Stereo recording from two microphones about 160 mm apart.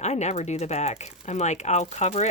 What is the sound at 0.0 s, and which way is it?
Speech, 45° left (ahead or behind).